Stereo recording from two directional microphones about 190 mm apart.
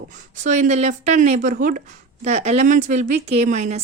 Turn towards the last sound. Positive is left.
turn(degrees=-35)  # may be behind; listen again after turning